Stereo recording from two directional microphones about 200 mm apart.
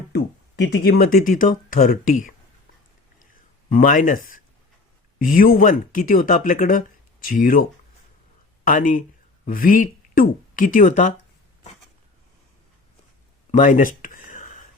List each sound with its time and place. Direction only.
0.1 s speech: 60° left (ahead or behind); by 2.3 s 40° left (ahead or behind)
3.7 s speech: 40° left (ahead or behind)
8.6 s speech: 45° left (ahead or behind)
13.5 s a sound: 40° left (ahead or behind)